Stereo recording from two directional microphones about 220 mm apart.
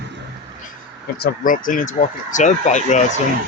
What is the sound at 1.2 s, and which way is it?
Speech, 40° left (ahead or behind).